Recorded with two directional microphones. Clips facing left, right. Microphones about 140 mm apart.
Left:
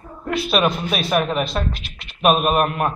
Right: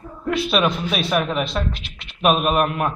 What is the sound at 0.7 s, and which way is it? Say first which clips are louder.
A man's voice: left 1 dB; 10° left (ahead or behind).